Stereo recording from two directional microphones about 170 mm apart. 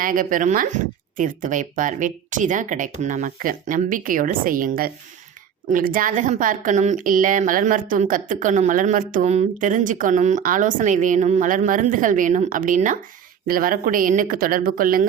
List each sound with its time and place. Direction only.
0.0 s a woman's voice: 55° right (ahead or behind)